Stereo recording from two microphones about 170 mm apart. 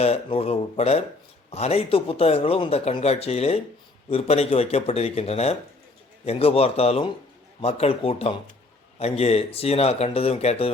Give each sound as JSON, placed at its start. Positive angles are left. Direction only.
{"t": 0.0, "sound": "speech", "side_deg": 35}